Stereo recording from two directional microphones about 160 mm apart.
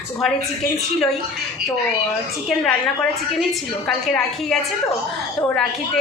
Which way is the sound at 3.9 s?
Centre (ahead or behind).